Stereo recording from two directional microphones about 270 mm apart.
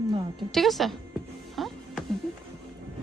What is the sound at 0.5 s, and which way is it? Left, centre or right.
Speech, centre.